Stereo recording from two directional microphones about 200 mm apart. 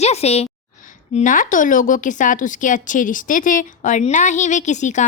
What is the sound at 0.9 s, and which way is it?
A woman's voice, 40° left (ahead or behind).